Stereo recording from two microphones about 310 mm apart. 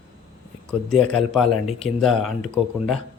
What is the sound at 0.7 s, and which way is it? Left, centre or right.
Speech, centre.